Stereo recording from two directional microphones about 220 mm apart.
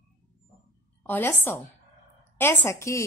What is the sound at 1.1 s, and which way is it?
Speech, 10° left (ahead or behind).